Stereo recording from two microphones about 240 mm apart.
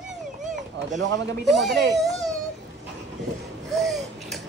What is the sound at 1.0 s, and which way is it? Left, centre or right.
Speech, right.